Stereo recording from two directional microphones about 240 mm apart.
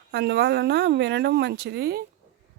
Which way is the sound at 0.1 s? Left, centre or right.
Right.